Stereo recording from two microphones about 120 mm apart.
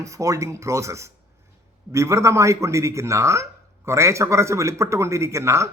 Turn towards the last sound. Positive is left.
turn(degrees=-25)  # may be behind; listen again after turning